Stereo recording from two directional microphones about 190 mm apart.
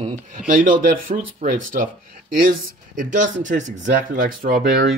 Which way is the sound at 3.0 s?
40° right (ahead or behind).